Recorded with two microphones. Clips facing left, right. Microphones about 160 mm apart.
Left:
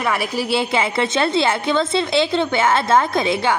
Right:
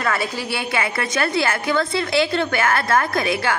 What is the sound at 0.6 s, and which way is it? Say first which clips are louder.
A woman's voice: left 3 dB; 25° left (ahead or behind).